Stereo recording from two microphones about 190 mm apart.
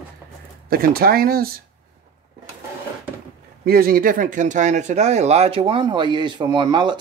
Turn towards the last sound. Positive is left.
turn(degrees=-25)  # may be behind; listen again after turning